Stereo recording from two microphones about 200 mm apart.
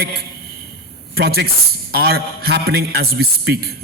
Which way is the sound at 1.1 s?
55° right (ahead or behind).